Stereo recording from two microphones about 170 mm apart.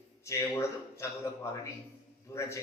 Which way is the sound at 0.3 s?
15° left (ahead or behind).